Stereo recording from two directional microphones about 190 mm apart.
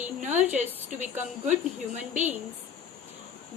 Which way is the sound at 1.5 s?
40° right (ahead or behind).